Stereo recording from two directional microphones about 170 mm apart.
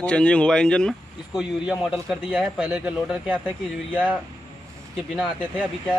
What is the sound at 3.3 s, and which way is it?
Speech, 5° left (ahead or behind).